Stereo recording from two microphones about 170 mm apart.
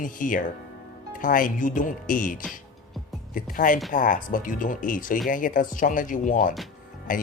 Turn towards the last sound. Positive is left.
turn(degrees=50)  # may be behind; listen again after turning